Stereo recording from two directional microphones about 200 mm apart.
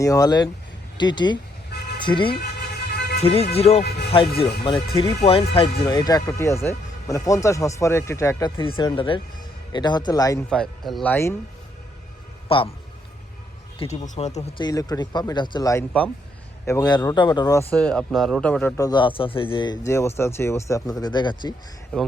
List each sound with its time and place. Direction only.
0.0 s speech: 15° left (ahead or behind)
10.5 s speech: centre (ahead or behind)
12.5 s speech: 25° left (ahead or behind)
13.8 s speech: 30° left (ahead or behind)
14.6 s speech: 20° left (ahead or behind)
18.8 s speech: 20° left (ahead or behind)